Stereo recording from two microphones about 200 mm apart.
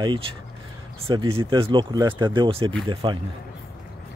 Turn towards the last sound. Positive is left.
turn(degrees=-25)  # may be behind; listen again after turning